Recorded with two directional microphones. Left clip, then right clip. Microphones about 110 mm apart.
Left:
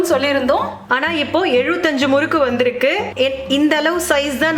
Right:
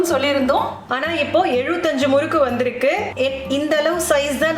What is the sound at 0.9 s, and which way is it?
A woman's voice, 40° left (ahead or behind).